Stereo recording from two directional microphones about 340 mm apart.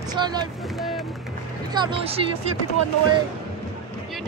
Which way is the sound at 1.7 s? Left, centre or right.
Centre.